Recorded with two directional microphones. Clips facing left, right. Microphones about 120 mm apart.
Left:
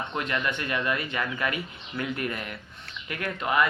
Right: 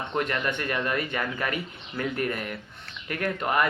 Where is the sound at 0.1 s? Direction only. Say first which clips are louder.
Right 4 dB; 40° right (ahead or behind).